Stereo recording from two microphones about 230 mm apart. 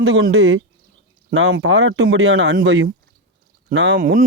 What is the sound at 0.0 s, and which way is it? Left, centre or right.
Speech, right.